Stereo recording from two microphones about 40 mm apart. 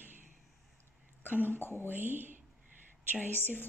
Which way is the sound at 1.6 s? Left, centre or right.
Left.